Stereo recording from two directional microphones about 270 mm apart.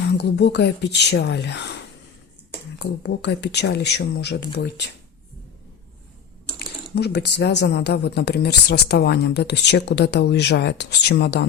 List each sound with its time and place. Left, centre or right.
0.0 s speech: left
6.9 s speech: left